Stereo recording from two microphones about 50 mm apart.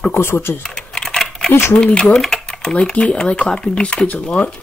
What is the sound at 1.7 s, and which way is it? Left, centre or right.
Speech, left.